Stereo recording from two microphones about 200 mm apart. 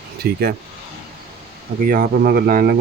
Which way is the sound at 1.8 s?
45° right (ahead or behind).